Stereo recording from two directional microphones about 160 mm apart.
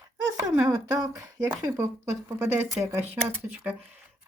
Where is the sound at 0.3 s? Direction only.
15° right (ahead or behind).